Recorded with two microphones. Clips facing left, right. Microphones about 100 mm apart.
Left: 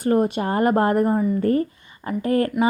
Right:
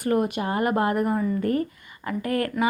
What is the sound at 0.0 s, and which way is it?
Speech, 30° left (ahead or behind).